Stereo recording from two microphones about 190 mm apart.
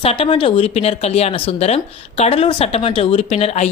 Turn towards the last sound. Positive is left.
turn(degrees=35)  # may be behind; listen again after turning